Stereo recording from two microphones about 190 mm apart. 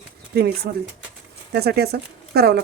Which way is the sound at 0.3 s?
55° right (ahead or behind).